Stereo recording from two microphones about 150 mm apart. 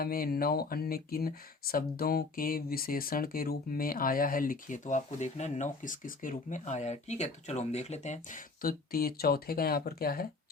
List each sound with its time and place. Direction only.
0.0 s speech: 85° left